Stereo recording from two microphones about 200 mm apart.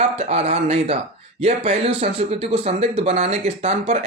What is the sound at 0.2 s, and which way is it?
Speech, 30° right (ahead or behind).